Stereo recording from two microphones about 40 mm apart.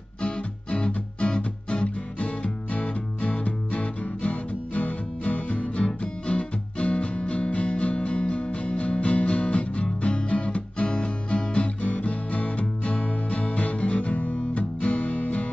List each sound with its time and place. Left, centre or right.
0.2 s music: left
10.0 s guitar: left